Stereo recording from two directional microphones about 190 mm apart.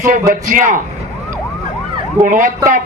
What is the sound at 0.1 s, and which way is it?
Speech, 45° right (ahead or behind).